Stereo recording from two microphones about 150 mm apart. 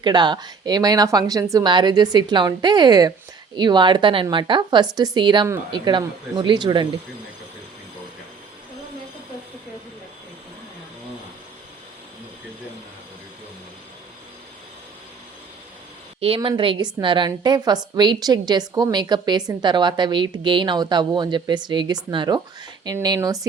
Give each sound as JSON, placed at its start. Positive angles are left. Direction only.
{"t": 0.0, "sound": "a woman's voice", "side_deg": -30}
{"t": 16.2, "sound": "a woman's voice", "side_deg": -35}